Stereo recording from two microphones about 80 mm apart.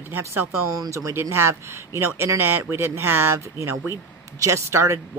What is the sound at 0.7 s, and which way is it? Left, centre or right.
Speech, right.